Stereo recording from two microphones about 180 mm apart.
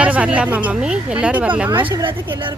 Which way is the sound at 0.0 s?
5° right (ahead or behind).